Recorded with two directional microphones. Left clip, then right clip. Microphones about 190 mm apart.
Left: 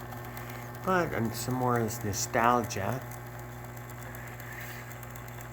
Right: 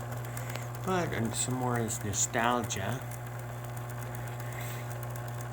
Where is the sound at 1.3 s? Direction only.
20° left (ahead or behind).